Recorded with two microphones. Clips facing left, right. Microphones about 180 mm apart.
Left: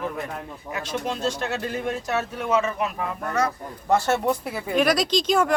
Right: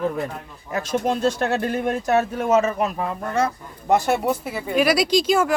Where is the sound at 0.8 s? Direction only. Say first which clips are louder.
Right 6 dB; 50° right (ahead or behind).